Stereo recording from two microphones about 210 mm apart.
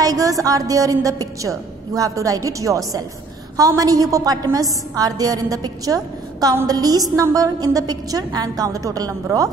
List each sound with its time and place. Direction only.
0.0 s a woman's voice: 15° right (ahead or behind)